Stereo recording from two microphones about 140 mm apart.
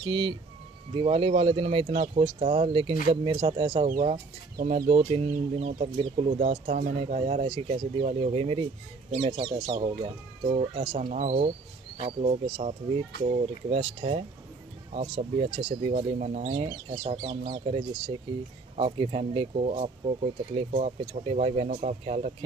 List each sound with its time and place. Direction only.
0.0 s speech: 35° right (ahead or behind)
4.6 s speech: 90° right
4.8 s speech: 50° right (ahead or behind)
11.1 s speech: 60° right (ahead or behind); by 15.9 s 45° right (ahead or behind)
15.9 s speech: 60° right (ahead or behind); by 19.5 s 40° right (ahead or behind)
19.5 s speech: 55° right (ahead or behind)